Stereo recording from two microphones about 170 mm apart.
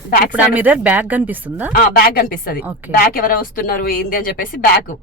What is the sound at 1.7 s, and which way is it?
A woman's voice, 65° left (ahead or behind).